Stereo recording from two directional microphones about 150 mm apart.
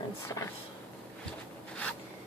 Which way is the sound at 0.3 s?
25° left (ahead or behind).